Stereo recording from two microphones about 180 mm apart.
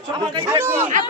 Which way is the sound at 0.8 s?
40° right (ahead or behind).